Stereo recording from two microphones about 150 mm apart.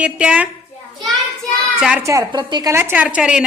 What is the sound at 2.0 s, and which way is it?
Speech, 25° right (ahead or behind).